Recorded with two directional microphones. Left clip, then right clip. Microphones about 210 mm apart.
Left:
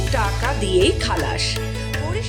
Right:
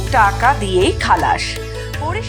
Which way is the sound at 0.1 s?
15° right (ahead or behind).